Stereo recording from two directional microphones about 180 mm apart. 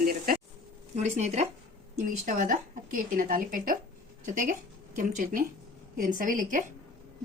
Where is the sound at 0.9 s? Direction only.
40° right (ahead or behind).